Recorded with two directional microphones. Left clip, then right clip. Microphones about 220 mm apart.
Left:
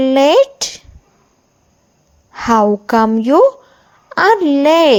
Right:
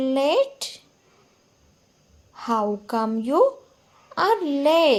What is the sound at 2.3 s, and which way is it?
A woman's voice, 40° left (ahead or behind).